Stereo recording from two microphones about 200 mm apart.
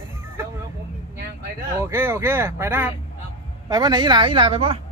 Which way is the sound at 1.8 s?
10° right (ahead or behind).